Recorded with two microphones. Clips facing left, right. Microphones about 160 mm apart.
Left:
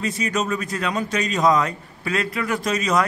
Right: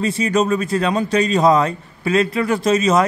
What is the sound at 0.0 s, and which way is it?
A man's voice, 30° right (ahead or behind).